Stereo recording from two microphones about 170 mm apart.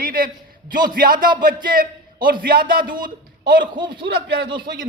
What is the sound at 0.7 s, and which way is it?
A woman's voice, 55° right (ahead or behind).